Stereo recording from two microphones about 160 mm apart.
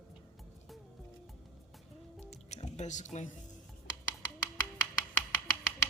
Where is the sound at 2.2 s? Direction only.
40° left (ahead or behind).